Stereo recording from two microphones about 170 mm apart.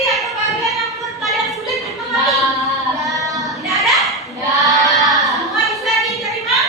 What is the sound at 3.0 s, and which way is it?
Child singing, 20° right (ahead or behind).